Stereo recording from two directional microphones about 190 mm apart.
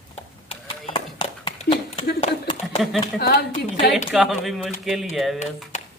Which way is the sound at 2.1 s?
30° left (ahead or behind).